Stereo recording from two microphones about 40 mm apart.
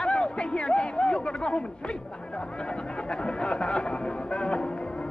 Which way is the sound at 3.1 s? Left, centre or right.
Left.